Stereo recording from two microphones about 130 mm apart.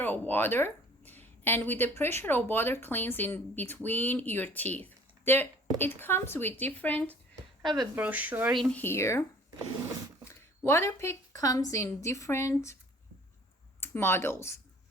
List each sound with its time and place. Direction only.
0.0 s speech: 15° left (ahead or behind)
7.6 s speech: 35° right (ahead or behind)
7.9 s speech: 15° right (ahead or behind)
8.7 s speech: 15° left (ahead or behind)
10.2 s speech: 20° left (ahead or behind)
13.8 s speech: 20° left (ahead or behind)